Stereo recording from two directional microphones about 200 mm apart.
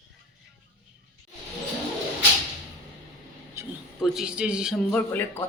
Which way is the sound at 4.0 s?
5° right (ahead or behind).